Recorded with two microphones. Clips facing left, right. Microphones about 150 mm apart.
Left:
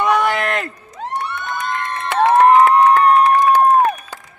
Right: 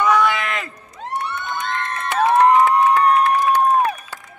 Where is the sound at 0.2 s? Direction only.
45° left (ahead or behind).